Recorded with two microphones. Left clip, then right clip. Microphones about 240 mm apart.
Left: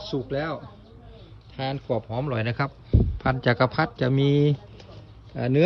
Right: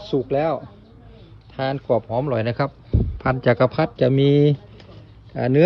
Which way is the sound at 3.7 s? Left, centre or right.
Left.